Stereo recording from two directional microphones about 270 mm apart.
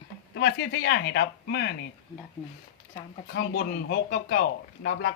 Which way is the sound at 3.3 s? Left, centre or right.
Left.